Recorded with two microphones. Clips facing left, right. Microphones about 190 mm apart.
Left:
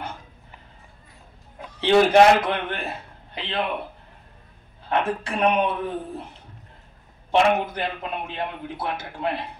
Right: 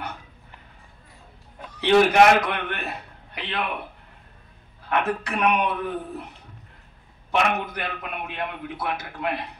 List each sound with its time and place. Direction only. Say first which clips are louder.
1.8 s a man's voice: left 1 dB; 25° left (ahead or behind)
4.8 s a man's voice: left 1 dB; 25° left (ahead or behind)
7.2 s a man's voice: left 4 dB; 30° left (ahead or behind)